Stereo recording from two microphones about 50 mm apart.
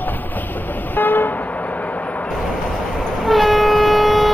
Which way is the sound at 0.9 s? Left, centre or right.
Left.